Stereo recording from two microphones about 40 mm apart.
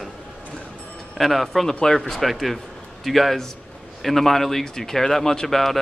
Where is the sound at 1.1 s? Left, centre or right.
Centre.